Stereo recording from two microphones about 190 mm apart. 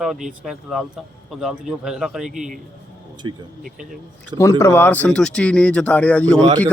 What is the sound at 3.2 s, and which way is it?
Speech, 25° right (ahead or behind).